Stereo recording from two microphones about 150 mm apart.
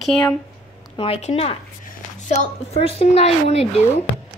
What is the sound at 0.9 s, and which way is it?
Speech, 40° left (ahead or behind).